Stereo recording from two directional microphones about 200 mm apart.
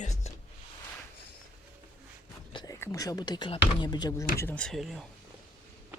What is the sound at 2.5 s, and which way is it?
Speech, 20° left (ahead or behind).